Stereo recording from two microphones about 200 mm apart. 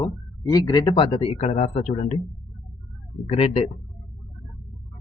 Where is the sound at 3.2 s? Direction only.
30° left (ahead or behind).